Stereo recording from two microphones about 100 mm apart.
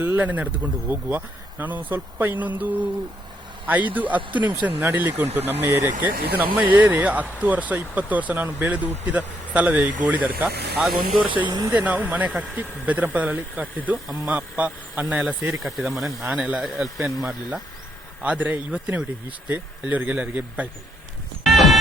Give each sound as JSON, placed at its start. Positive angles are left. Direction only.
{"t": 0.0, "sound": "speech", "side_deg": -20}
{"t": 10.4, "sound": "speech", "side_deg": 0}
{"t": 11.3, "sound": "speech", "side_deg": -50}
{"t": 11.7, "sound": "speech", "side_deg": -15}
{"t": 15.6, "sound": "speech", "side_deg": 0}
{"t": 16.2, "sound": "speech", "side_deg": -15}
{"t": 21.4, "sound": "music", "side_deg": 0}